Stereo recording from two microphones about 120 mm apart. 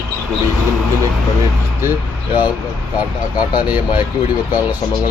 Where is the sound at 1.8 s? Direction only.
15° right (ahead or behind).